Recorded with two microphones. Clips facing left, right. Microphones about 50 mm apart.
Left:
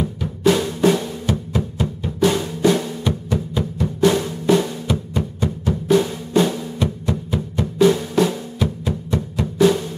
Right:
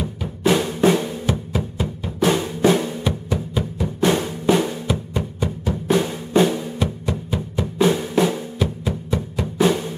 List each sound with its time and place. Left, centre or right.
0.4 s drum: right
3.1 s music: centre
4.0 s drum: right
4.8 s drum: centre
6.8 s music: centre
7.8 s drum: centre
9.6 s drum: right